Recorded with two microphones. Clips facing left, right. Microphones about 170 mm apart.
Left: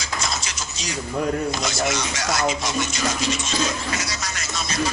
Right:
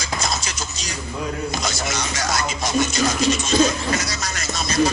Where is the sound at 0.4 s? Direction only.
40° right (ahead or behind).